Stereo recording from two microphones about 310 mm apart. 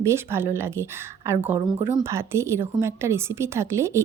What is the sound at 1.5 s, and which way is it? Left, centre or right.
Speech, centre.